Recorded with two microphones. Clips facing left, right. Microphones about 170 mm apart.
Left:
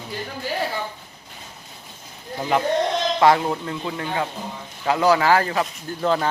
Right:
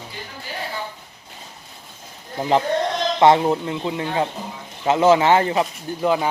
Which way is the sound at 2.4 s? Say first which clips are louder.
Right 1 dB; 25° right (ahead or behind).